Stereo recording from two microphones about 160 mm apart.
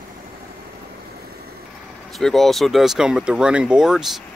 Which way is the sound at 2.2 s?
Centre (ahead or behind).